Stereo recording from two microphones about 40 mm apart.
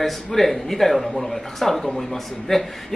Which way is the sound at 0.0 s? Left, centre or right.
Centre.